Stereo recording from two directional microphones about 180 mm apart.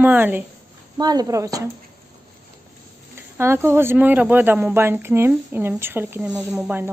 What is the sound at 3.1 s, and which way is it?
A woman's voice, 15° right (ahead or behind).